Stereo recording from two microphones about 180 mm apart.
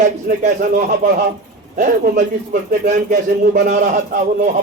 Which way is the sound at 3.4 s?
50° right (ahead or behind).